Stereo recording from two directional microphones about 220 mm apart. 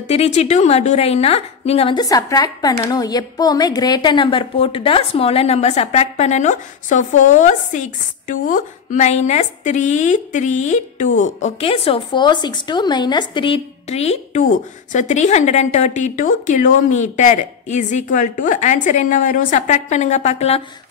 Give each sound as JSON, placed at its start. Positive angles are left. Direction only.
{"t": 0.1, "sound": "a woman's voice", "side_deg": 30}